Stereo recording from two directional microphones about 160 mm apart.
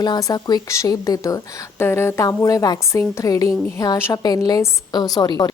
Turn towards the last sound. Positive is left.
turn(degrees=25)  # may be behind; listen again after turning